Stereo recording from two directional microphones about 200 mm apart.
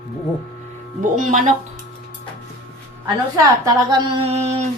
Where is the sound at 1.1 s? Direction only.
40° right (ahead or behind).